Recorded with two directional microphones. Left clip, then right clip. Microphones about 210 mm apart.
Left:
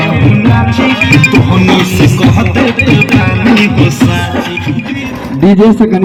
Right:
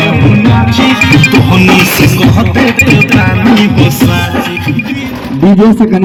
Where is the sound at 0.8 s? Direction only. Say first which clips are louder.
Right 1 dB; 45° right (ahead or behind).